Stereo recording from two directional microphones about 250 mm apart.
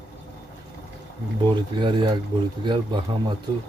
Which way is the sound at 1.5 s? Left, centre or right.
Centre.